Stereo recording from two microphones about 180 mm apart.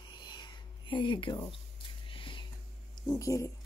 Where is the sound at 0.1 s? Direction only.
25° left (ahead or behind).